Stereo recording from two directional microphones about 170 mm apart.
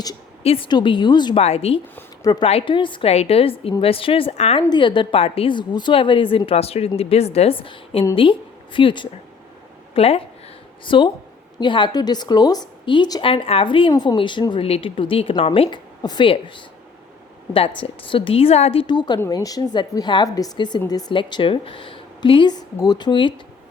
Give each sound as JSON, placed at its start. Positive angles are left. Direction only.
{"t": 0.4, "sound": "a woman's voice", "side_deg": 30}
{"t": 1.4, "sound": "a woman's voice", "side_deg": 40}
{"t": 2.0, "sound": "a sound", "side_deg": 20}
{"t": 2.4, "sound": "a woman's voice", "side_deg": 35}
{"t": 4.6, "sound": "a woman's voice", "side_deg": 25}
{"t": 17.5, "sound": "a woman's voice", "side_deg": 30}